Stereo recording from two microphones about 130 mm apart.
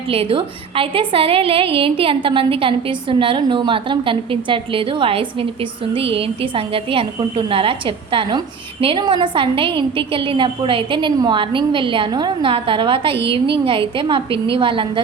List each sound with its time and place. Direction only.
0.1 s a woman's voice: 45° right (ahead or behind)